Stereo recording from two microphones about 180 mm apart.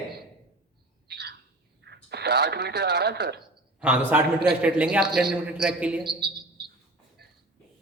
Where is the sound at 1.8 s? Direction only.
65° right (ahead or behind).